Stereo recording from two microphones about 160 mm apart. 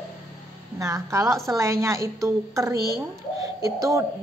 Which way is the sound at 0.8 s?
20° right (ahead or behind).